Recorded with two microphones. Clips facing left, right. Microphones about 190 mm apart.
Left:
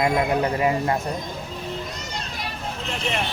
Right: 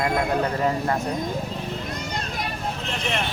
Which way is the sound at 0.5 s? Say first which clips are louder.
Left 2 dB; 10° left (ahead or behind).